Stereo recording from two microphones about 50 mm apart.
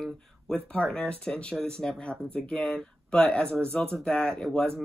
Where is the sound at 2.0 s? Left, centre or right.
Left.